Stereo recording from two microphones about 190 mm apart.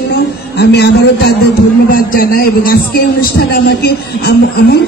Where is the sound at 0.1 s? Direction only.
60° left (ahead or behind).